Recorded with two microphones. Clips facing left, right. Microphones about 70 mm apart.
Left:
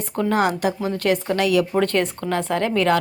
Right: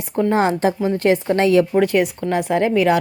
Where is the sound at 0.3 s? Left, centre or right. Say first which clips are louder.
Right 2 dB; right.